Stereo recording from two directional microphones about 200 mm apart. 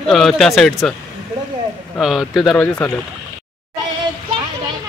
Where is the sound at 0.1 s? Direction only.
Centre (ahead or behind).